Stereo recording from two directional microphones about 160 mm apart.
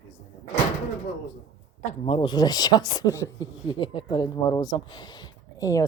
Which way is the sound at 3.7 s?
30° left (ahead or behind).